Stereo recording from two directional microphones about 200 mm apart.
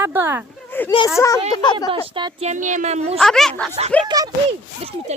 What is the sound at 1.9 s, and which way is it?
Speech, 25° right (ahead or behind).